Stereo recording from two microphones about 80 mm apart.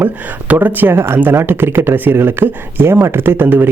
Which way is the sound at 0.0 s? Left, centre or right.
Right.